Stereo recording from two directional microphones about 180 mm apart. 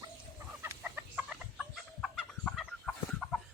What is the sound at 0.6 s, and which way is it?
Chicken, 10° right (ahead or behind).